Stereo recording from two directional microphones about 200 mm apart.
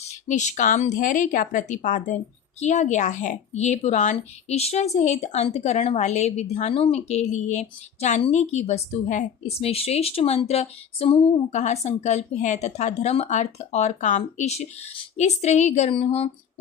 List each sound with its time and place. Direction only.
0.3 s a woman's voice: 35° left (ahead or behind)